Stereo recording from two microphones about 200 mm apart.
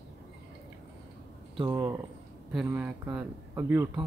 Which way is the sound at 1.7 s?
15° right (ahead or behind).